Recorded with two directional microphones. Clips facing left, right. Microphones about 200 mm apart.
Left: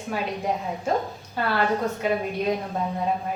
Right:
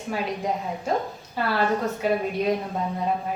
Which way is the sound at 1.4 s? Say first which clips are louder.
Even; centre (ahead or behind).